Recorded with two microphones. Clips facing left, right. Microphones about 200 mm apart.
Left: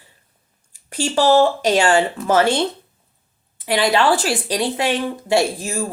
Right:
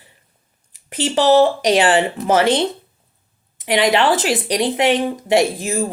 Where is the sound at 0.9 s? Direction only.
20° right (ahead or behind).